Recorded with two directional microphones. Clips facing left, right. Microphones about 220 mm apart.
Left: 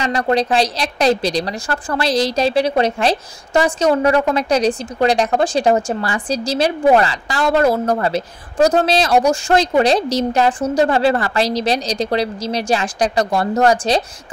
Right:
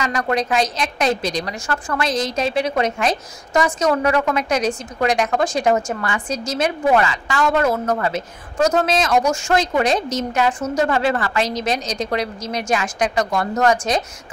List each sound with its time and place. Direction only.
0.0 s a woman's voice: 30° left (ahead or behind)